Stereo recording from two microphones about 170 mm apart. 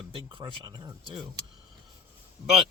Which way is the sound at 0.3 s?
30° right (ahead or behind).